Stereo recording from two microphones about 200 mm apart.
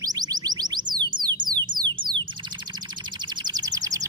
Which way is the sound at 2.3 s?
25° right (ahead or behind).